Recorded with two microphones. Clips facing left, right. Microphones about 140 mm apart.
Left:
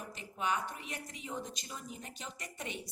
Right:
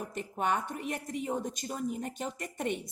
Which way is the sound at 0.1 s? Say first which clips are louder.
Right 4 dB; 50° right (ahead or behind).